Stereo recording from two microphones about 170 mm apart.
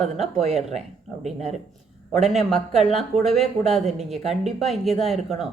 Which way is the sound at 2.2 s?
Centre (ahead or behind).